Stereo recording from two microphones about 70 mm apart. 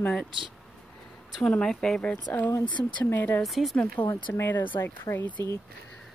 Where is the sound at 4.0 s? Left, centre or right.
Left.